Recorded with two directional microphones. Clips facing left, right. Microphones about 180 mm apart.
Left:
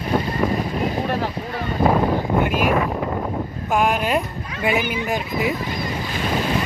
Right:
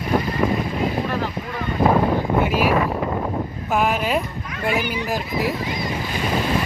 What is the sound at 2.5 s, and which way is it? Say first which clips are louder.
Vehicle: right 1 dB; 50° left (ahead or behind).